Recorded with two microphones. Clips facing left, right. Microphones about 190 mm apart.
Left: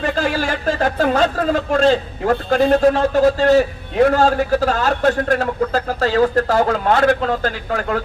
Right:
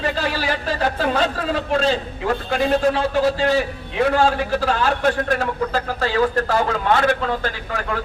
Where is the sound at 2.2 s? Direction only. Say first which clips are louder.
Left 5 dB; 45° left (ahead or behind).